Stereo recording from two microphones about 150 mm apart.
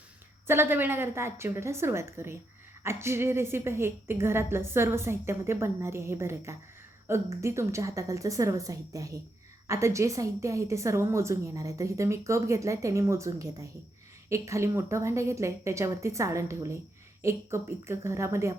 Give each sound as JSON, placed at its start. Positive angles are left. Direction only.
{"t": 0.4, "sound": "a woman's voice", "side_deg": -15}